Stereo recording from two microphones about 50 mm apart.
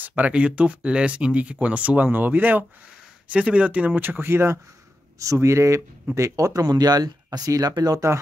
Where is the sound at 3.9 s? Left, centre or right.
Right.